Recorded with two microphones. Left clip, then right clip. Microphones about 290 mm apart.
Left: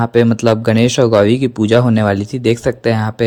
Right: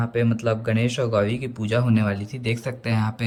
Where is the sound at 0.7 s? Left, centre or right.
Centre.